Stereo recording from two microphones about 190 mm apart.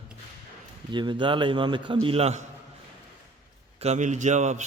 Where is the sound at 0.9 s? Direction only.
25° right (ahead or behind).